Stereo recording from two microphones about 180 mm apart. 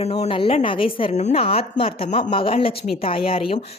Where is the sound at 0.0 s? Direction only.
35° left (ahead or behind).